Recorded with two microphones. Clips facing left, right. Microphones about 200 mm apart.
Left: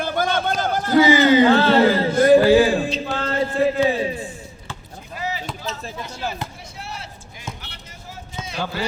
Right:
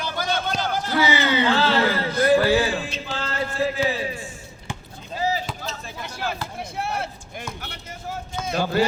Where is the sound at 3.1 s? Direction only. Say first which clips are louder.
Left 5 dB; 55° left (ahead or behind).